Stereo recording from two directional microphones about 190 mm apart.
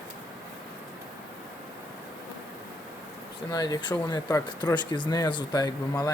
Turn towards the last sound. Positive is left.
turn(degrees=20)  # may be behind; listen again after turning